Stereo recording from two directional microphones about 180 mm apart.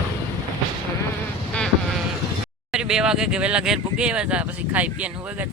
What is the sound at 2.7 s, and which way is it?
Speech, 5° right (ahead or behind).